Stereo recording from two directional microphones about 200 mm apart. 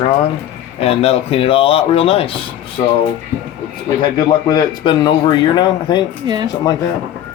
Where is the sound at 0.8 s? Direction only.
30° left (ahead or behind).